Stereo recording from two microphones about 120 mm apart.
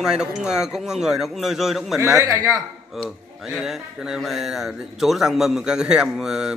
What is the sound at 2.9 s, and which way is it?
Speech, centre (ahead or behind).